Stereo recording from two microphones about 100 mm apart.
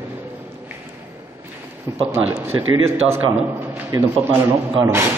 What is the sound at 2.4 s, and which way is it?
Speech, 25° right (ahead or behind).